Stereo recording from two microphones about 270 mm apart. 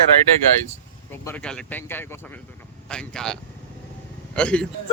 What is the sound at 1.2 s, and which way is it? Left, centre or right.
Speech, centre.